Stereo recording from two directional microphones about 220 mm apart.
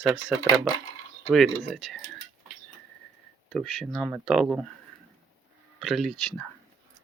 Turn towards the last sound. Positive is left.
turn(degrees=0)  # may be behind; listen again after turning